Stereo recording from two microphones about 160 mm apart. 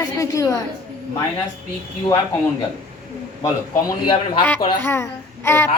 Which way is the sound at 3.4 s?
25° left (ahead or behind).